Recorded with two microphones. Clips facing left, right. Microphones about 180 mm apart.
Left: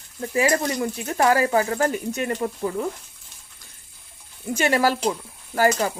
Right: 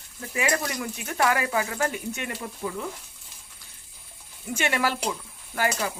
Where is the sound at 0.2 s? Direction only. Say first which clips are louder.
Left 6 dB; 35° left (ahead or behind).